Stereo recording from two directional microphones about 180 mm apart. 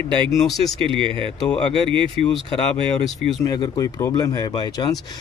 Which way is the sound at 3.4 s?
20° left (ahead or behind).